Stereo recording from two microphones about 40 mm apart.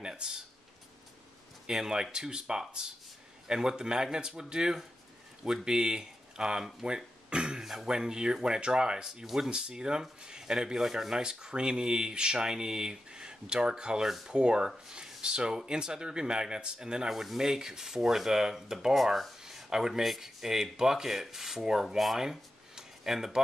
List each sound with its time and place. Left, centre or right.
0.0 s a sound: centre
1.7 s speech: centre
7.6 s speech: centre
9.5 s speech: right
14.0 s speech: centre
14.3 s speech: right
17.1 s speech: centre
18.9 s speech: centre
19.4 s speech: centre